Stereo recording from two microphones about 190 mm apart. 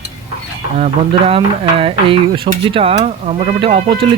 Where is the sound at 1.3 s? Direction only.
30° right (ahead or behind).